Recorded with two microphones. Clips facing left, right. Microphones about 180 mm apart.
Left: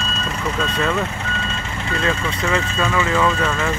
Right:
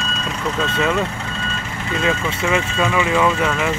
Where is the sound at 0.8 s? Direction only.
15° right (ahead or behind).